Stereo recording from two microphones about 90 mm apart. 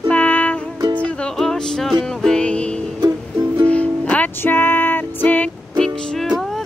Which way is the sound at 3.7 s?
15° left (ahead or behind).